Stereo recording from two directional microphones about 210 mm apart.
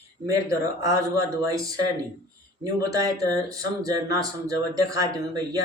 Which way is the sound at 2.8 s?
15° right (ahead or behind).